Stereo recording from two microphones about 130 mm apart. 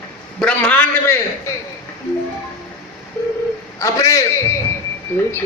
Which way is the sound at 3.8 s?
25° left (ahead or behind).